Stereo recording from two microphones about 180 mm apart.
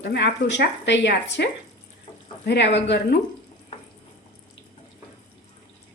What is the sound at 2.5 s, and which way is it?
Speech, 75° left (ahead or behind).